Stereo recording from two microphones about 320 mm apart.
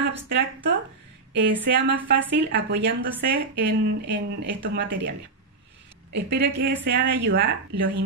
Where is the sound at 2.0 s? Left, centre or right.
Right.